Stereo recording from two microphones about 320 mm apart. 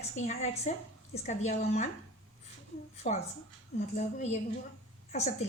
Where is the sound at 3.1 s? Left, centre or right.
Centre.